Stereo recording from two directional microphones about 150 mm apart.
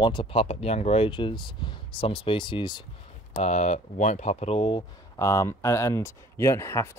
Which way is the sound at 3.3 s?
50° left (ahead or behind).